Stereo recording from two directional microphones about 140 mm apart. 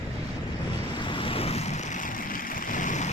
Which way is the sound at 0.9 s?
35° left (ahead or behind).